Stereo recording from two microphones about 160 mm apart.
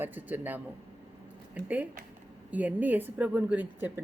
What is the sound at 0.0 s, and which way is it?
Speech, 10° right (ahead or behind).